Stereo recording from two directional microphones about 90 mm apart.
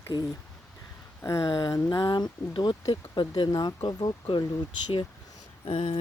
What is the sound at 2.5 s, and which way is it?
Speech, 60° left (ahead or behind).